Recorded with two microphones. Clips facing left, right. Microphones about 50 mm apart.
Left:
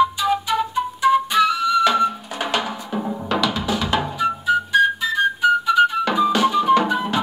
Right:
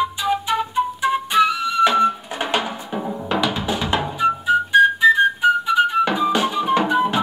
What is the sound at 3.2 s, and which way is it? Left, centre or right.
Music, centre.